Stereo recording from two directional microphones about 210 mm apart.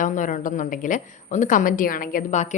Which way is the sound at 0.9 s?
35° left (ahead or behind).